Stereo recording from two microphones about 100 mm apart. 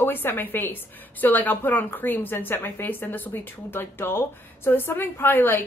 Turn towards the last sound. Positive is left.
turn(degrees=20)  # may be behind; listen again after turning